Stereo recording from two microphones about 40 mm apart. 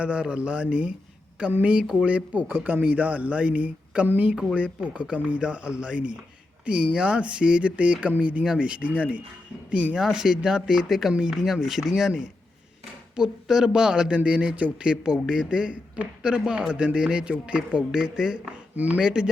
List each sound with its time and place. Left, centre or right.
0.0 s speech: right
2.5 s speech: right
8.4 s speech: right
10.0 s speech: centre
13.1 s speech: centre
14.3 s speech: right
14.8 s speech: centre
17.9 s speech: centre
18.5 s speech: right
18.9 s speech: right